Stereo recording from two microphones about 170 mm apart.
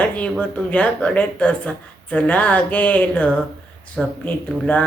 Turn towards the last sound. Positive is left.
turn(degrees=10)  # may be behind; listen again after turning